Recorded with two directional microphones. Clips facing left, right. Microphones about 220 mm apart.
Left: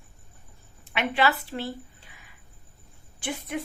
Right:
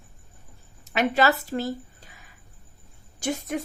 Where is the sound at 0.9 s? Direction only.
40° right (ahead or behind).